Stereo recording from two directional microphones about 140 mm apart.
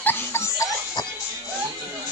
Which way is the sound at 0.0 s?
15° left (ahead or behind).